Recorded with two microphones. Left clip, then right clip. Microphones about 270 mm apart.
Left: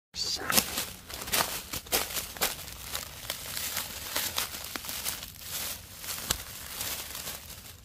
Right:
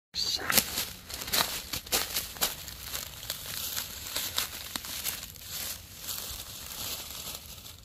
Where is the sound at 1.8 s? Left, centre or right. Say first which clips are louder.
Even; centre.